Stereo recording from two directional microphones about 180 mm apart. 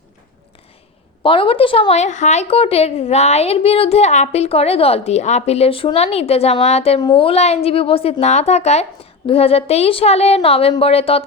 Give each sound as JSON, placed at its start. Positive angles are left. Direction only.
{"t": 1.2, "sound": "a woman's voice", "side_deg": 30}